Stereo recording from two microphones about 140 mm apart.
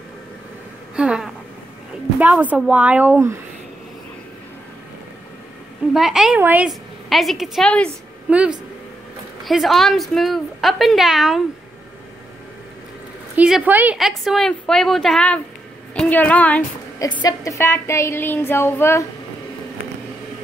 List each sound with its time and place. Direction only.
0.9 s a sound: 5° right (ahead or behind)
2.1 s a woman's voice: 10° right (ahead or behind)
5.9 s a woman's voice: 5° right (ahead or behind)
6.7 s a woman's voice: centre (ahead or behind)
8.3 s a woman's voice: 10° right (ahead or behind)
13.4 s a woman's voice: 10° right (ahead or behind)
13.9 s a woman's voice: centre (ahead or behind)
17.0 s speech: 30° left (ahead or behind)